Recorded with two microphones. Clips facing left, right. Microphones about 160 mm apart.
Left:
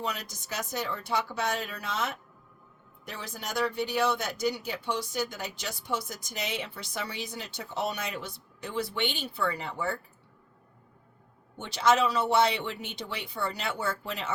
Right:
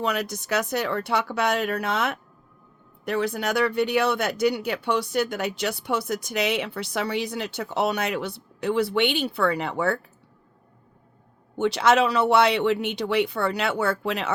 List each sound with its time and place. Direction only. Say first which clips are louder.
0.0 s speech: right 9 dB; 70° right (ahead or behind)
11.5 s speech: right 5 dB; 70° right (ahead or behind)